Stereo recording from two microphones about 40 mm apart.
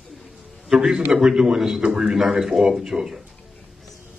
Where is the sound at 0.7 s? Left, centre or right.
Centre.